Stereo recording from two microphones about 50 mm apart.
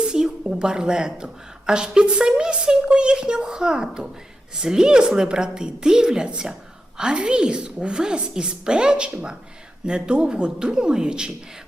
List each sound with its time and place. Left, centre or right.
0.0 s a woman's voice: centre